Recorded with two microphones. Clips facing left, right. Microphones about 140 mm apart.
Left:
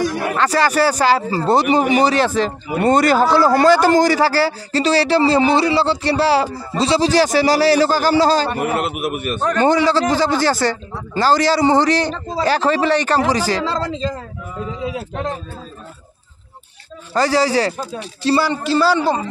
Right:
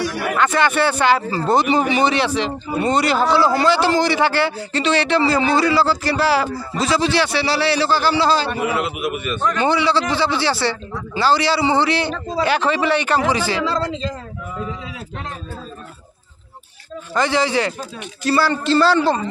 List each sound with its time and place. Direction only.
0.1 s speech: 25° left (ahead or behind)
2.0 s speech: 45° left (ahead or behind)
17.1 s speech: 40° left (ahead or behind)
18.4 s a man's voice: 15° left (ahead or behind)